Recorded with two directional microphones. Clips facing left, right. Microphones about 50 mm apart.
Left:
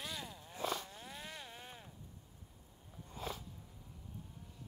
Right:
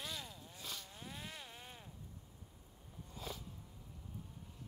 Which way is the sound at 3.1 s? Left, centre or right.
Left.